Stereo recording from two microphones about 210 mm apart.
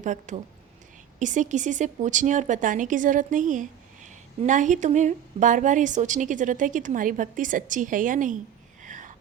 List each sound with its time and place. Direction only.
0.0 s speech: 35° right (ahead or behind)
8.8 s whispering: 35° right (ahead or behind)